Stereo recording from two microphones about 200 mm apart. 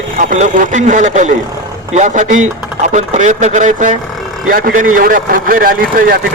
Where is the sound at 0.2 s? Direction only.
40° right (ahead or behind).